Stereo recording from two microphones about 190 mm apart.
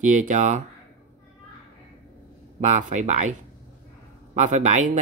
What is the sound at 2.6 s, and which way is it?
Speech, 40° right (ahead or behind).